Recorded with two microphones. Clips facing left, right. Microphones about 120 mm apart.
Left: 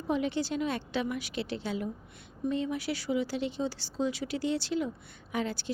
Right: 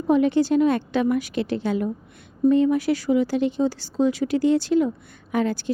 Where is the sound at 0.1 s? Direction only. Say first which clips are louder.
Right 12 dB; 50° right (ahead or behind).